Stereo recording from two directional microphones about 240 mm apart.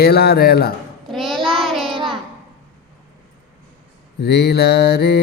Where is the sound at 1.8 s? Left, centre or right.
Right.